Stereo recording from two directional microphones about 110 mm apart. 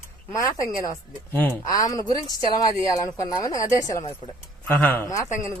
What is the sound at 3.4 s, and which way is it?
Speech, 30° left (ahead or behind).